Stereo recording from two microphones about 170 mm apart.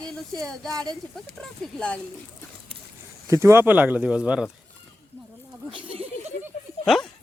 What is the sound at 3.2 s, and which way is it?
Speech, 15° right (ahead or behind).